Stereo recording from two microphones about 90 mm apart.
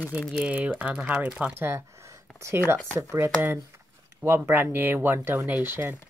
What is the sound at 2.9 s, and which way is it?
Speech, 35° right (ahead or behind).